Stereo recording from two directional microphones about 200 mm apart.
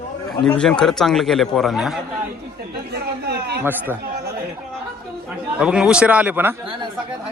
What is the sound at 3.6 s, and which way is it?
Speech, 10° right (ahead or behind).